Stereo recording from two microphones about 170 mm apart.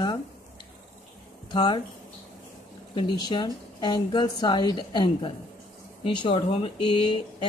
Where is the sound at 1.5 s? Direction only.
25° left (ahead or behind).